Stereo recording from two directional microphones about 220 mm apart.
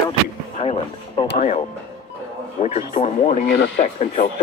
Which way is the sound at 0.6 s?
25° left (ahead or behind).